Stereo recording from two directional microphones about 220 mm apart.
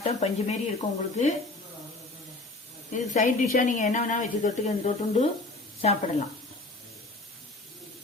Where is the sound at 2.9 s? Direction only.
35° left (ahead or behind).